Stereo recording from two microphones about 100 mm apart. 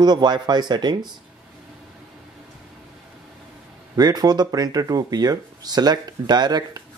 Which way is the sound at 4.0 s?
40° right (ahead or behind).